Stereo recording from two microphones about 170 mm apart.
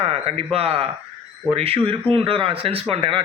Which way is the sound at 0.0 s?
35° right (ahead or behind).